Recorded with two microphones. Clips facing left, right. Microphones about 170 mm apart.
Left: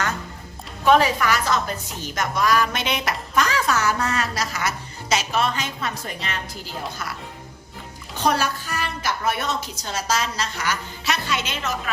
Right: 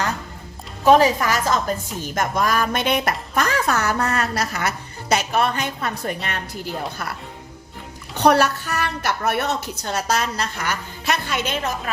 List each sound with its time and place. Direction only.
0.9 s a woman's voice: 40° right (ahead or behind); by 7.2 s 55° right (ahead or behind)
8.2 s a woman's voice: 65° right (ahead or behind)